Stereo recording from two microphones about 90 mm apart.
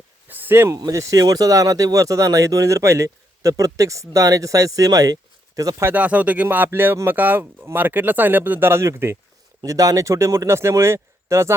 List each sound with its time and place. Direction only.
0.3 s a sound: 20° right (ahead or behind)
0.7 s speech: 40° right (ahead or behind)
5.8 s speech: 20° right (ahead or behind)
9.6 s speech: 40° right (ahead or behind)